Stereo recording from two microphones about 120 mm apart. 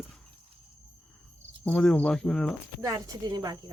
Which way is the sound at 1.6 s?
5° left (ahead or behind).